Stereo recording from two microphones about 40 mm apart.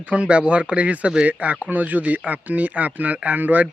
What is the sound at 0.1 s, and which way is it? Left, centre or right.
Speech, right.